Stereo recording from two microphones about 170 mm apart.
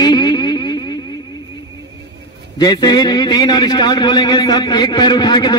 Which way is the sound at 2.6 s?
25° left (ahead or behind).